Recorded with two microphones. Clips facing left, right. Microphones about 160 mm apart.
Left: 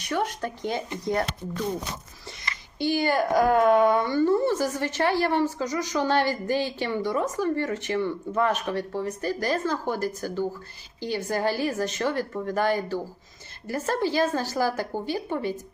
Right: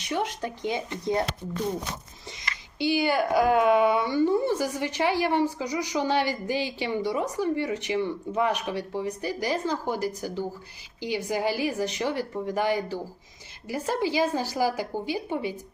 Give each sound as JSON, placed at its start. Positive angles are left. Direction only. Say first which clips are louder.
{"t": 0.0, "sound": "a woman's voice", "louder": "left 1 dB", "side_deg": -20}
{"t": 2.8, "sound": "a woman's voice", "louder": "even", "side_deg": -10}